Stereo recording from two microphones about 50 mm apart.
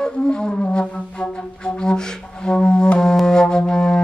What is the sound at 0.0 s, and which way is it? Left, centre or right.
Flute, centre.